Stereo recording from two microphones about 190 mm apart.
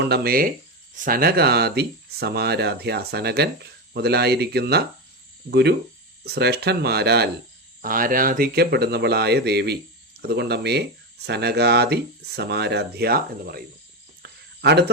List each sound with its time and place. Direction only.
0.0 s speech: 55° right (ahead or behind)
7.8 s speech: 45° right (ahead or behind)
14.2 s cricket: 60° right (ahead or behind)